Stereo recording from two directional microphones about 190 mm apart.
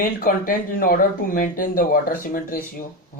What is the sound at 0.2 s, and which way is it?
Speech, 50° left (ahead or behind).